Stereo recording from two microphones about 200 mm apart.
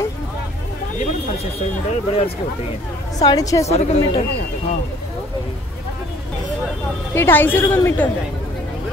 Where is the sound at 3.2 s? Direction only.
15° left (ahead or behind).